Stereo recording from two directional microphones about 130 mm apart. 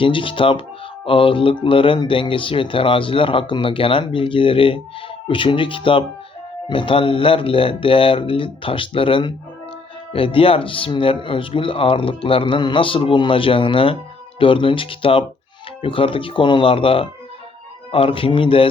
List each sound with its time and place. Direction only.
0.0 s speech: 40° left (ahead or behind)